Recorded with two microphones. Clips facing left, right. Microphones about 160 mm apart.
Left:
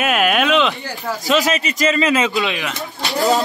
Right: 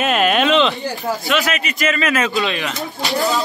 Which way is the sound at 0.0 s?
5° left (ahead or behind).